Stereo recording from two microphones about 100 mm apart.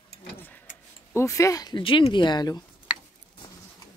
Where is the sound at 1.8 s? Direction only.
60° left (ahead or behind); by 2.6 s 45° left (ahead or behind).